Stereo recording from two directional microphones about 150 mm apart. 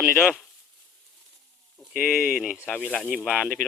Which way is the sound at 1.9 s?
5° right (ahead or behind).